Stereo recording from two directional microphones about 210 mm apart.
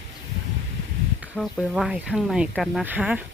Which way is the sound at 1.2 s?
Centre (ahead or behind).